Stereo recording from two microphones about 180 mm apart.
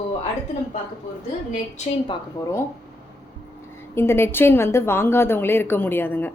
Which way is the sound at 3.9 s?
15° left (ahead or behind).